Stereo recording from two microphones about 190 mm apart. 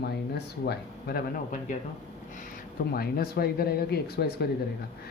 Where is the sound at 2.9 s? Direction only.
55° left (ahead or behind).